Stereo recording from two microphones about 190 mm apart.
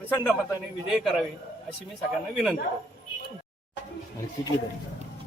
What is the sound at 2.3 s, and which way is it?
Speech, centre (ahead or behind).